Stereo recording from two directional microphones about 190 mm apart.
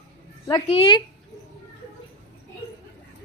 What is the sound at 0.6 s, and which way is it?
Speech, 30° left (ahead or behind).